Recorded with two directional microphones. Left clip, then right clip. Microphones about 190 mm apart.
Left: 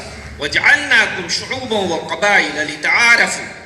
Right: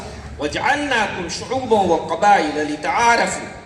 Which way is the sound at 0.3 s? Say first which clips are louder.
Left 6 dB; 50° right (ahead or behind).